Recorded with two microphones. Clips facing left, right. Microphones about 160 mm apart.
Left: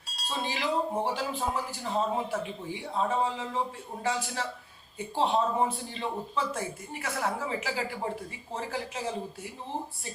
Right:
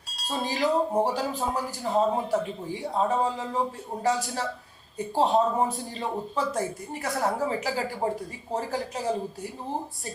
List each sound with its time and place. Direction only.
0.2 s cutlery: centre (ahead or behind)
0.4 s a man's voice: 40° right (ahead or behind)